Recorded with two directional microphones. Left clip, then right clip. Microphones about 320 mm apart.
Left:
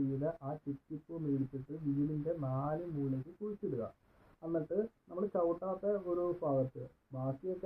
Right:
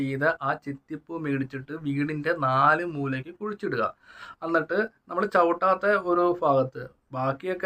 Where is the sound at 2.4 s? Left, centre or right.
Right.